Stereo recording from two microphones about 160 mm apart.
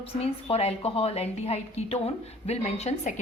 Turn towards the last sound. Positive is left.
turn(degrees=45)  # may be behind; listen again after turning